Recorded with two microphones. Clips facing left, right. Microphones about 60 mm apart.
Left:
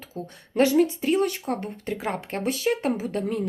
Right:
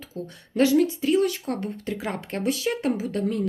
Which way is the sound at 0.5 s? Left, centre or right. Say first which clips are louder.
Even; centre.